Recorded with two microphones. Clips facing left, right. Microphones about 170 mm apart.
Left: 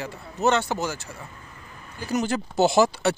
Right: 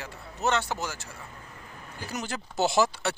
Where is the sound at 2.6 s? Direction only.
45° left (ahead or behind).